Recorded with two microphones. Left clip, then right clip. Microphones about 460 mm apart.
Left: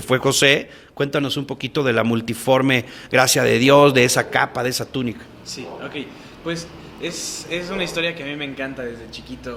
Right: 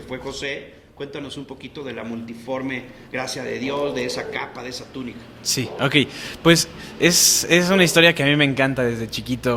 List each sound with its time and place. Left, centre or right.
0.1 s speech: left
5.5 s a man's voice: right